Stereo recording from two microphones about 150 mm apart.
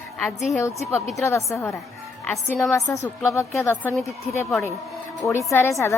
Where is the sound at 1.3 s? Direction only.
20° left (ahead or behind).